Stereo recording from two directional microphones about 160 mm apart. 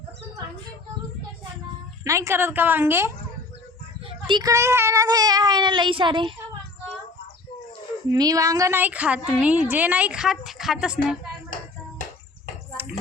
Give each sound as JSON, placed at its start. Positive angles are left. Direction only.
{"t": 2.0, "sound": "speech", "side_deg": -20}
{"t": 4.3, "sound": "a woman's voice", "side_deg": -25}
{"t": 8.1, "sound": "speech", "side_deg": -25}